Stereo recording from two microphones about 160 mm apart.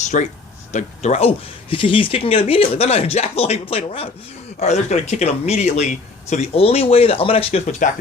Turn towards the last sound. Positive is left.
turn(degrees=45)  # may be behind; listen again after turning